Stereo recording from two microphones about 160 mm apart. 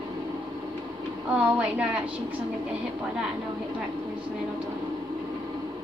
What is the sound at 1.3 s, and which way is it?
Speech, 10° right (ahead or behind).